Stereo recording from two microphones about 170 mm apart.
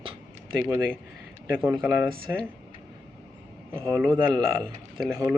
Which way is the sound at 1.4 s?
10° right (ahead or behind).